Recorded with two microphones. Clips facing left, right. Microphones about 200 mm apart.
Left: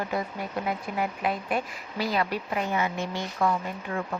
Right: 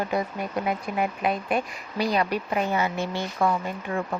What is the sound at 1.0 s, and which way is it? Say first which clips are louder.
Speech: right 3 dB; 20° right (ahead or behind).